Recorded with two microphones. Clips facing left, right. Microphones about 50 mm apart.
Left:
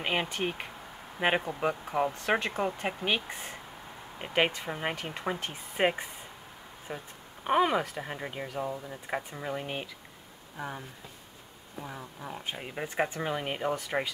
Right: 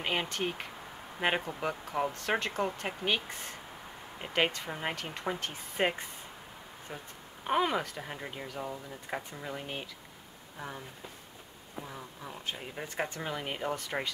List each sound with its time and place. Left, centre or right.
0.0 s speech: centre
11.8 s speech: centre